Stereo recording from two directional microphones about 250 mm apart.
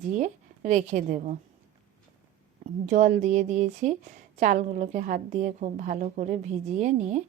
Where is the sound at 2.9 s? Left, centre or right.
Right.